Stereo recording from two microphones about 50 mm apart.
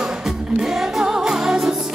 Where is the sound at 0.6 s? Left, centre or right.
Centre.